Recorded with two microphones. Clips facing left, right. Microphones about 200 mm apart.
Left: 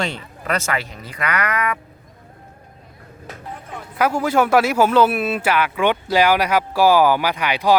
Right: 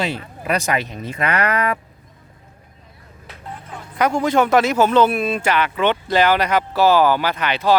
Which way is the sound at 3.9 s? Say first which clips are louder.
Right 1 dB; 5° left (ahead or behind).